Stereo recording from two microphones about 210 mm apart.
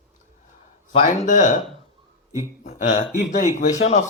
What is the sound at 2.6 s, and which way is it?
Speech, 35° left (ahead or behind).